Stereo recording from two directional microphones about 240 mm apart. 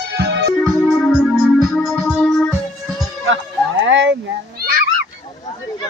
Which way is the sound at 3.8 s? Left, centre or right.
Right.